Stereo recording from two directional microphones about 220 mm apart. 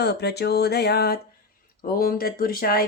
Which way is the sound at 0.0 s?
50° left (ahead or behind).